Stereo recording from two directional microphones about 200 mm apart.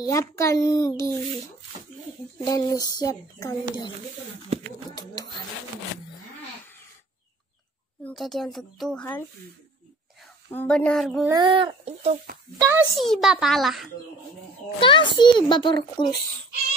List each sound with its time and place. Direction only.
0.0 s a child's voice: 15° left (ahead or behind)
2.4 s speech: 20° left (ahead or behind)
8.0 s speech: centre (ahead or behind)
10.2 s a woman's voice: 5° left (ahead or behind)
11.3 s speech: 25° right (ahead or behind)
12.5 s a child's voice: 15° right (ahead or behind)
12.9 s speech: centre (ahead or behind)
14.8 s speech: 25° left (ahead or behind)